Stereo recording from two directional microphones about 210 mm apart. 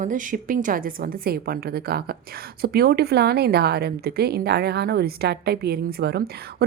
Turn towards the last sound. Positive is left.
turn(degrees=-50)  # may be behind; listen again after turning